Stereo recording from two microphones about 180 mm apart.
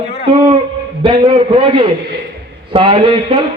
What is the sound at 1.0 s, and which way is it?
A man's voice, 30° right (ahead or behind).